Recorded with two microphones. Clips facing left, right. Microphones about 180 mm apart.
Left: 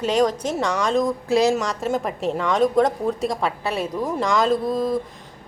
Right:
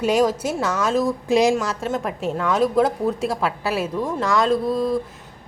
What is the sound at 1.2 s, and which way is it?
Speech, 15° right (ahead or behind).